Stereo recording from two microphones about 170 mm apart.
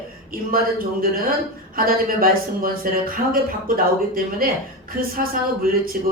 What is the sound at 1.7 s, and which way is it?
Speech, 60° right (ahead or behind).